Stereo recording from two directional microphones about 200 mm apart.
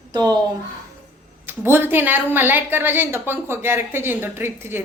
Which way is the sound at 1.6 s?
10° right (ahead or behind).